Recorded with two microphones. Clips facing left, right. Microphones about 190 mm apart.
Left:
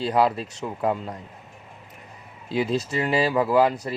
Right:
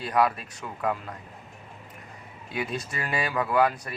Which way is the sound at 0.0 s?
25° left (ahead or behind).